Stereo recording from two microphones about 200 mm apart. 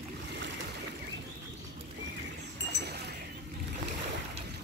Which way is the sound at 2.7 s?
55° right (ahead or behind).